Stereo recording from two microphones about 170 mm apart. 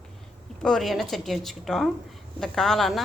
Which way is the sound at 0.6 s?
Centre (ahead or behind).